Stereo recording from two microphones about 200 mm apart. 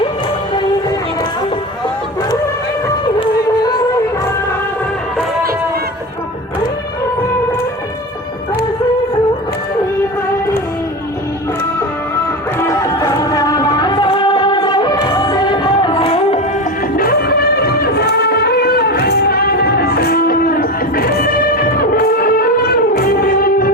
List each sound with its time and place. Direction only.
3.2 s music: 20° left (ahead or behind)
12.5 s music: 15° left (ahead or behind)
17.0 s music: 50° left (ahead or behind)